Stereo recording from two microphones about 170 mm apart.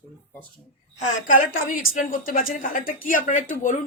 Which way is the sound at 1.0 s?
50° left (ahead or behind).